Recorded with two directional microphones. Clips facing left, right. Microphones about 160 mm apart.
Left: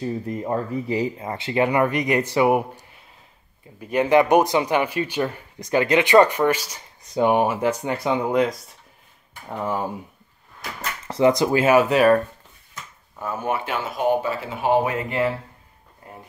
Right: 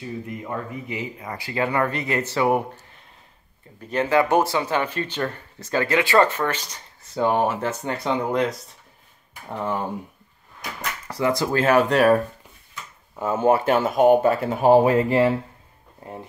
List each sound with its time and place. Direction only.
0.0 s speech: 35° left (ahead or behind); by 2.8 s 15° left (ahead or behind)
3.8 s speech: 15° left (ahead or behind)
9.5 s speech: 5° left (ahead or behind)
11.1 s speech: 20° left (ahead or behind); by 12.2 s centre (ahead or behind)
13.1 s speech: 25° right (ahead or behind)
13.5 s speech: 45° right (ahead or behind)